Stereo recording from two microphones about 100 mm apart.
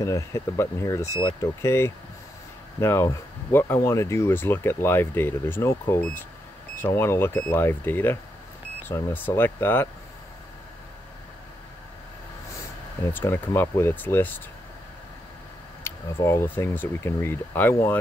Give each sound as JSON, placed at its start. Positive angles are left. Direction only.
{"t": 0.0, "sound": "speech", "side_deg": 30}
{"t": 13.1, "sound": "speech", "side_deg": 25}
{"t": 15.8, "sound": "speech", "side_deg": 30}